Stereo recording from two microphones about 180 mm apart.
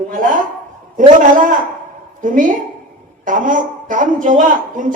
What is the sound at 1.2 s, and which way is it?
A man's voice, 50° right (ahead or behind).